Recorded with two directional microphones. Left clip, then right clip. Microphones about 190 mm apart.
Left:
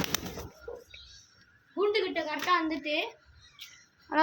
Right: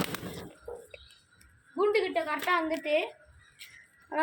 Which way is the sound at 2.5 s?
45° left (ahead or behind).